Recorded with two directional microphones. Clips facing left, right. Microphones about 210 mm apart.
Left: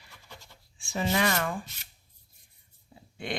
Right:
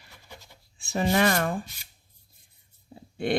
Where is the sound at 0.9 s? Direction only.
45° right (ahead or behind).